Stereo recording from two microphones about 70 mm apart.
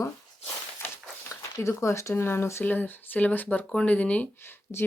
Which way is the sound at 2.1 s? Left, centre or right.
Left.